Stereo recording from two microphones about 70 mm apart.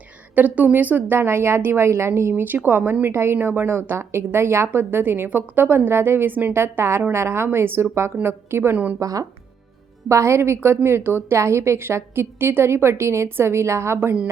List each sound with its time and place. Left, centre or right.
0.3 s a woman's voice: right
2.3 s a woman's voice: right
8.7 s a woman's voice: right
9.0 s speech: right
10.1 s a woman's voice: right